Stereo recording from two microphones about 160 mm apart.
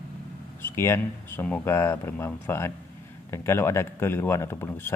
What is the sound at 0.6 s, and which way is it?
A man's voice, 15° left (ahead or behind).